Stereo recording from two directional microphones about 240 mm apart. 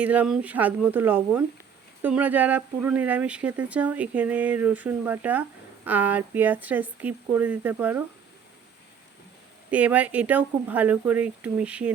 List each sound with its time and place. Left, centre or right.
0.0 s speech: centre
9.6 s speech: centre